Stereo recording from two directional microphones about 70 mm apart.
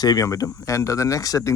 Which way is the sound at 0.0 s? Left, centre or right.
Left.